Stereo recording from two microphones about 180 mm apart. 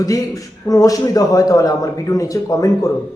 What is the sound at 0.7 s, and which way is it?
Speech, 20° left (ahead or behind).